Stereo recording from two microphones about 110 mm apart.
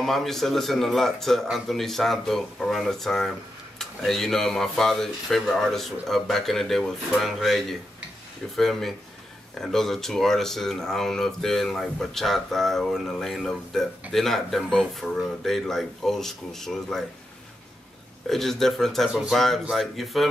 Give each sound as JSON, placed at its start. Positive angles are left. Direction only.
{"t": 0.0, "sound": "a man's voice", "side_deg": 0}
{"t": 18.3, "sound": "a man's voice", "side_deg": 0}